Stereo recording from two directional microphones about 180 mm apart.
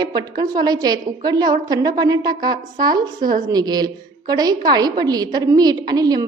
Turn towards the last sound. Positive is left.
turn(degrees=-20)  # may be behind; listen again after turning